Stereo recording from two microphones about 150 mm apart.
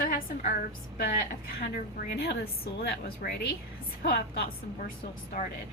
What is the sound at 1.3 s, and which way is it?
A woman's voice, 90° left.